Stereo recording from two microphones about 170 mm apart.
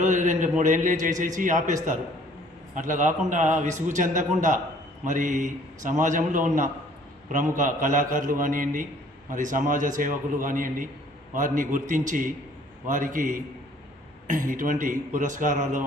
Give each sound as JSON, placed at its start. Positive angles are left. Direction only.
{"t": 0.0, "sound": "a man's voice", "side_deg": -45}